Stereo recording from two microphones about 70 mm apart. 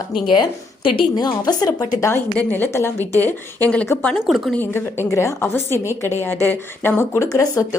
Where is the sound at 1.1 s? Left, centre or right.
Left.